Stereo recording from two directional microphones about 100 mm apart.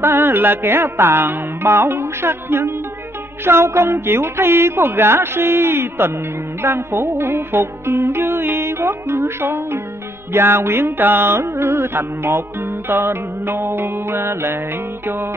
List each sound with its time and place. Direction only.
0.0 s music: 20° right (ahead or behind)